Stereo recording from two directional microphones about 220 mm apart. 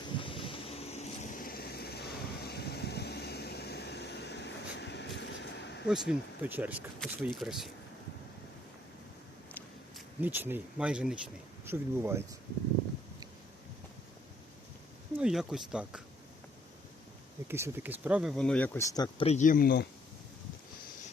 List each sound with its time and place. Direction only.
0.2 s vehicle: 25° left (ahead or behind); by 5.8 s 50° left (ahead or behind)
5.9 s speech: 5° right (ahead or behind)
10.2 s speech: 10° right (ahead or behind)
15.2 s speech: centre (ahead or behind)
17.5 s speech: 10° right (ahead or behind); by 19.9 s 45° left (ahead or behind)